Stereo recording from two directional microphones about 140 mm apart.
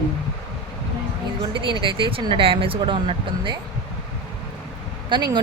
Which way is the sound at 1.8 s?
40° right (ahead or behind).